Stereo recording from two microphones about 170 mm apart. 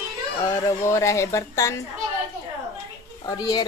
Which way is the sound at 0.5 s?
20° left (ahead or behind).